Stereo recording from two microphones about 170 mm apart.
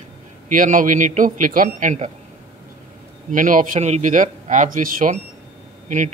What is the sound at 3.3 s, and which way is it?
A man's voice, 50° right (ahead or behind).